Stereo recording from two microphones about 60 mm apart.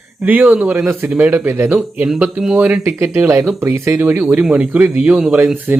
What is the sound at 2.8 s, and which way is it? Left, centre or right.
Speech, right.